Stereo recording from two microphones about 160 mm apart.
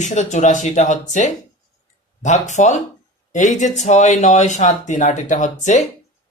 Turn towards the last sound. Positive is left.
turn(degrees=50)  # may be behind; listen again after turning